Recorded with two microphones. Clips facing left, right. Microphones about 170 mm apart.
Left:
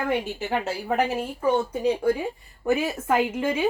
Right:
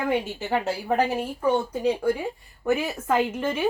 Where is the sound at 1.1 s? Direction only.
5° left (ahead or behind).